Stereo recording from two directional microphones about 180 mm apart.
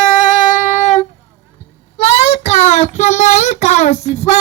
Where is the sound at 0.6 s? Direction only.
40° left (ahead or behind).